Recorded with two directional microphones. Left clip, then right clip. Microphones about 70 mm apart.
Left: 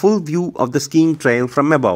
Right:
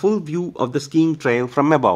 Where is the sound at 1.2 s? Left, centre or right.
Left.